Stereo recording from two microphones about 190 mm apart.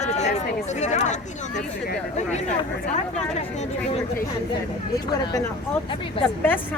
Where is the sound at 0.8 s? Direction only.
40° left (ahead or behind).